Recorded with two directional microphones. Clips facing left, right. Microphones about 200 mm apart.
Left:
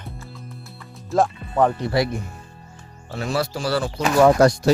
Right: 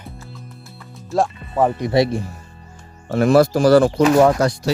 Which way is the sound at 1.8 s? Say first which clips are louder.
Right 5 dB; 25° right (ahead or behind).